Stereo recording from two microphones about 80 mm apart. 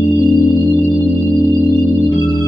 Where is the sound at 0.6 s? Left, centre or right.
Centre.